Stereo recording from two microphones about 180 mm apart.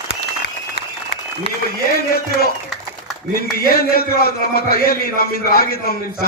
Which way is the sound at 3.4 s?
60° left (ahead or behind).